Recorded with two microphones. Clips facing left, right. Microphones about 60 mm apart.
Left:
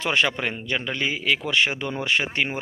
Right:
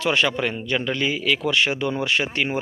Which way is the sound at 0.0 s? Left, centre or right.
Left.